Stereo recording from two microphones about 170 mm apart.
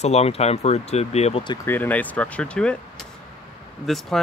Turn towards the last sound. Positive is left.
turn(degrees=0)  # may be behind; listen again after turning